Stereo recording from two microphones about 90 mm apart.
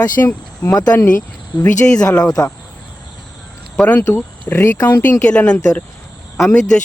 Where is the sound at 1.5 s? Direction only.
55° left (ahead or behind).